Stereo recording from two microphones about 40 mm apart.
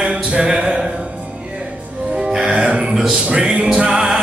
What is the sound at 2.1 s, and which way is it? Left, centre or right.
Music, centre.